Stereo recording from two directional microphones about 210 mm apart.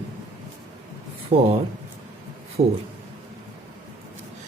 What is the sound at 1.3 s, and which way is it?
Speech, 35° right (ahead or behind).